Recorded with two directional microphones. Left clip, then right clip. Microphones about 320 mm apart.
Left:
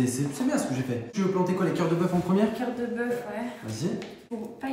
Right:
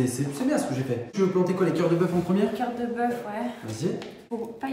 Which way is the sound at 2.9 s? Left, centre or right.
Centre.